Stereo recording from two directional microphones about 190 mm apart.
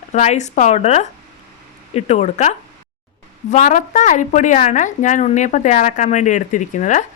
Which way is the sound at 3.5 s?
40° left (ahead or behind).